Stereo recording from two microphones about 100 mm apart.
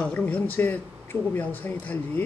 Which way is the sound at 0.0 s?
15° left (ahead or behind).